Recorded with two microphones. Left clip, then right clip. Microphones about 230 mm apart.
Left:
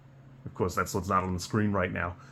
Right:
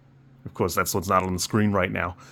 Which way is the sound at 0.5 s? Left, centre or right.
Right.